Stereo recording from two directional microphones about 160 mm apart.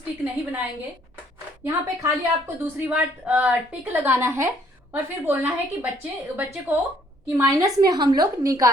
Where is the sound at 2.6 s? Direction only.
10° right (ahead or behind).